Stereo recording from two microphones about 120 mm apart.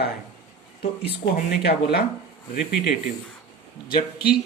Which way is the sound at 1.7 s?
55° left (ahead or behind).